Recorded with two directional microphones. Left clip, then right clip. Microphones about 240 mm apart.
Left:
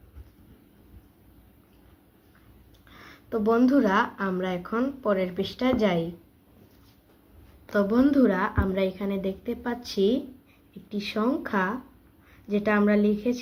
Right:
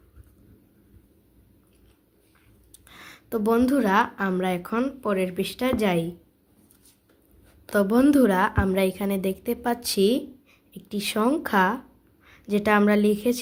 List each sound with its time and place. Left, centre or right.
2.9 s speech: right
7.7 s a woman's voice: right